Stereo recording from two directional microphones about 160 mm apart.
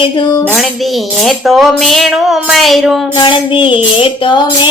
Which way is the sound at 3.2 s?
30° left (ahead or behind).